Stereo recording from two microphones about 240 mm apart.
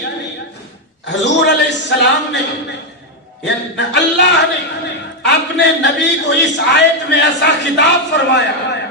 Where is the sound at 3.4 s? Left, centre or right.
Left.